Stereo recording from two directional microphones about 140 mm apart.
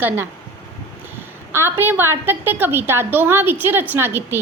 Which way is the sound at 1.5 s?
15° right (ahead or behind).